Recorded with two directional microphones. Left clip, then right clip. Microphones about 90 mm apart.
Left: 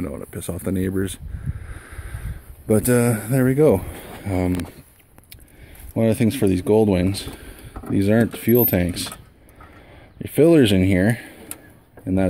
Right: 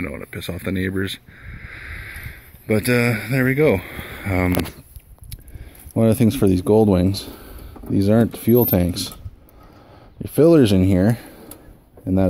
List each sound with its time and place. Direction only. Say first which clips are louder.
0.0 s speech: right 1 dB; 20° left (ahead or behind)
1.7 s boat: right 8 dB; 40° left (ahead or behind)
2.7 s speech: even; 40° left (ahead or behind)
3.8 s speech: right 4 dB; 20° left (ahead or behind)
5.9 s speech: right 2 dB; 40° right (ahead or behind)
10.2 s speech: right 1 dB; 15° right (ahead or behind)